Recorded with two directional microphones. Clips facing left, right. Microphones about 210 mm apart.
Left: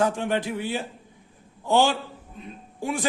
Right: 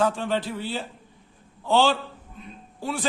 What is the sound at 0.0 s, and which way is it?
A man's voice, 15° left (ahead or behind).